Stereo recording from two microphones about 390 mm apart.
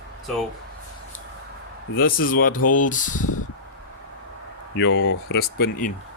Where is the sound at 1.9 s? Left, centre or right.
Left.